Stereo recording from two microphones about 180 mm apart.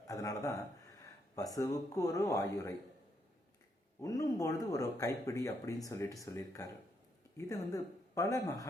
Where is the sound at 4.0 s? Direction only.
20° left (ahead or behind).